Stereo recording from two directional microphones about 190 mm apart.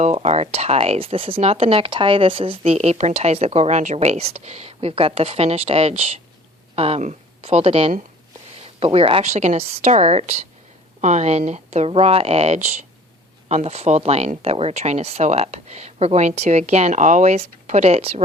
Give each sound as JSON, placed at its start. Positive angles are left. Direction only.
{"t": 0.0, "sound": "speech", "side_deg": -35}